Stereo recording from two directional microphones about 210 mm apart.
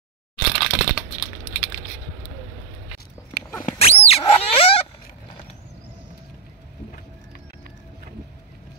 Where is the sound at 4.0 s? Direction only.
30° left (ahead or behind).